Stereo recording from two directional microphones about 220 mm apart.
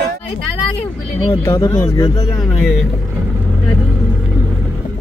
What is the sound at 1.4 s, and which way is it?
Speech, 15° left (ahead or behind).